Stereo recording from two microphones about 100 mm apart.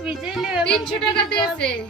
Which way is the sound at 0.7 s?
5° left (ahead or behind).